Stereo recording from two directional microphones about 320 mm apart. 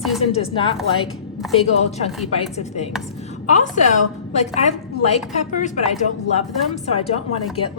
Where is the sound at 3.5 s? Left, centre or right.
Left.